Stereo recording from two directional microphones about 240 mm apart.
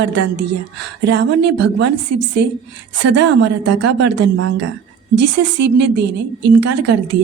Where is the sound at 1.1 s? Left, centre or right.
Right.